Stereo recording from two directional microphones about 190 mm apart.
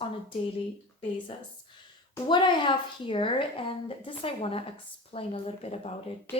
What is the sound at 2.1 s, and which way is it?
A woman's voice, 25° left (ahead or behind).